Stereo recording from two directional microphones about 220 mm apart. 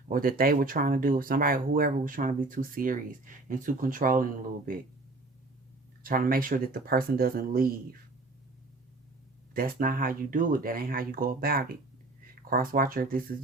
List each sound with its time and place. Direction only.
0.1 s speech: 40° right (ahead or behind)
6.0 s speech: 40° right (ahead or behind)
9.6 s speech: 40° right (ahead or behind)